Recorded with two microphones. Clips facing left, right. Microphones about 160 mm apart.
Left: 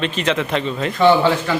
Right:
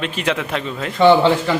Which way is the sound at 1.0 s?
20° right (ahead or behind).